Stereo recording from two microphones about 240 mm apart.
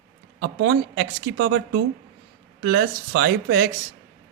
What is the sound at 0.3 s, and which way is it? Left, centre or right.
Speech, right.